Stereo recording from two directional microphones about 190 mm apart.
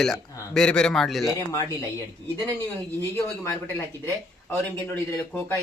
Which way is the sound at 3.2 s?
15° left (ahead or behind).